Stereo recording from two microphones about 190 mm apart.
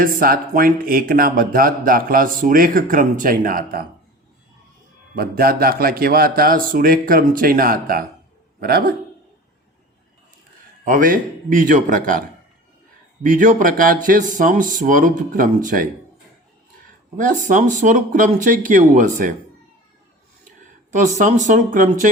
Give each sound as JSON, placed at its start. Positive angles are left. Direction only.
{"t": 0.0, "sound": "speech", "side_deg": -50}
{"t": 5.1, "sound": "speech", "side_deg": -50}
{"t": 10.8, "sound": "speech", "side_deg": -45}
{"t": 13.2, "sound": "speech", "side_deg": -45}
{"t": 17.2, "sound": "speech", "side_deg": -45}
{"t": 20.9, "sound": "speech", "side_deg": -40}